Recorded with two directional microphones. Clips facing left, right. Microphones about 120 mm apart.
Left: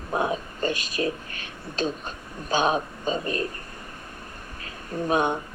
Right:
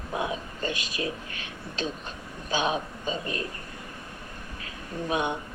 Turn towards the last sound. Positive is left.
turn(degrees=40)  # may be behind; listen again after turning